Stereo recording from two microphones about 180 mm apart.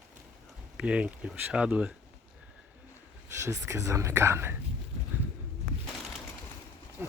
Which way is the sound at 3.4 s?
15° right (ahead or behind).